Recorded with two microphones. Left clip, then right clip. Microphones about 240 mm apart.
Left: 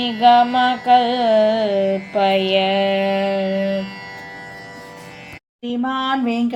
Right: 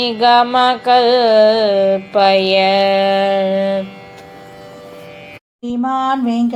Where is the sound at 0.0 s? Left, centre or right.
Centre.